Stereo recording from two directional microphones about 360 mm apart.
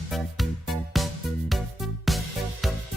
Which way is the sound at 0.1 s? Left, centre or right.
Centre.